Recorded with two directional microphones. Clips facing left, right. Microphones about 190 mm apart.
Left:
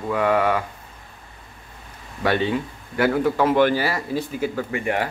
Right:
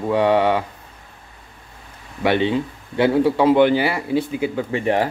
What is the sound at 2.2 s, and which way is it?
Speech, 20° right (ahead or behind).